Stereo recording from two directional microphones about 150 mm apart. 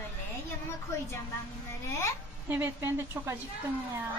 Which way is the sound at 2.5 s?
15° right (ahead or behind).